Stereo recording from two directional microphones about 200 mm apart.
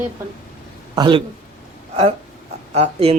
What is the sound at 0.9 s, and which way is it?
Speech, 20° right (ahead or behind).